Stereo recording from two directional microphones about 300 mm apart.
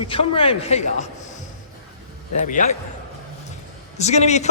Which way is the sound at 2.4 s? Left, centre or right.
Left.